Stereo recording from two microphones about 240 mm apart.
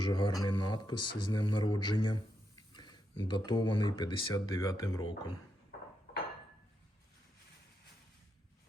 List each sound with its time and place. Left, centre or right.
0.0 s speech: centre